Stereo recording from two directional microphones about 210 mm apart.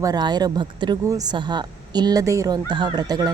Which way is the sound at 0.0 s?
20° right (ahead or behind).